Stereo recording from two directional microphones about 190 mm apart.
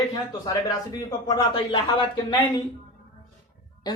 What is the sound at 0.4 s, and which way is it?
Speech, 20° left (ahead or behind).